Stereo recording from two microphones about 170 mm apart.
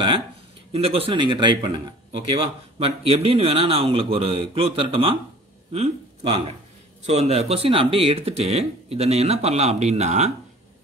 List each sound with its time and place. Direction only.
0.7 s speech: 35° right (ahead or behind)